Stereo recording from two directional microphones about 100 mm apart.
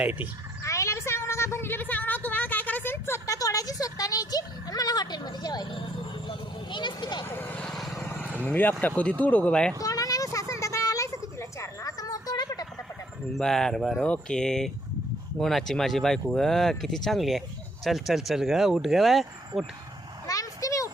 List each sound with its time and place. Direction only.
0.0 s speech: 15° right (ahead or behind)
0.6 s a sound: 30° left (ahead or behind)
3.2 s speech: 35° left (ahead or behind)
6.2 s vehicle: 50° left (ahead or behind)
7.3 s speech: 20° left (ahead or behind)
7.7 s vehicle: centre (ahead or behind)
8.4 s speech: 20° left (ahead or behind)
9.8 s a sound: 35° left (ahead or behind)
13.3 s speech: 5° left (ahead or behind)
20.2 s a sound: 35° left (ahead or behind)